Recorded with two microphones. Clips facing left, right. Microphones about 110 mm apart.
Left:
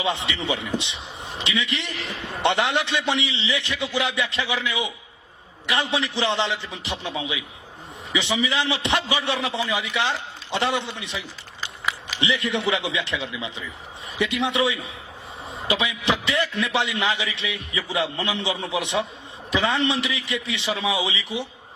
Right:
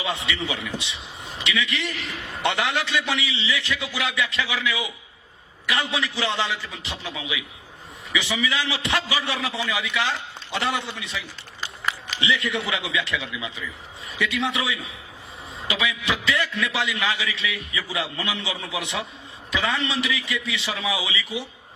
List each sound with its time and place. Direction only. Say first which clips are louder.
0.0 s a man's voice: left 2 dB; 25° left (ahead or behind)
11.6 s a sound: even; 5° left (ahead or behind)
12.2 s a man's voice: left 2 dB; 20° left (ahead or behind)